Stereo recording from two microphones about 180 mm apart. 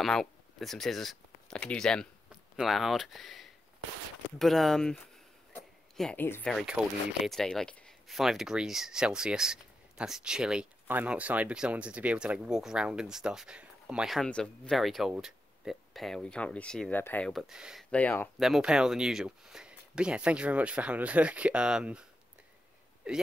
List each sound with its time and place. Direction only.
0.0 s speech: centre (ahead or behind)
5.6 s a sound: 5° left (ahead or behind)
6.5 s speech: 5° right (ahead or behind)
17.9 s speech: 10° left (ahead or behind)
18.4 s speech: 5° right (ahead or behind)
23.0 s a man's voice: 5° right (ahead or behind)